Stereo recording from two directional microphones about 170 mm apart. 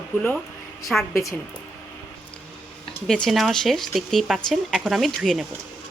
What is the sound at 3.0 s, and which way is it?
Speech, 5° left (ahead or behind).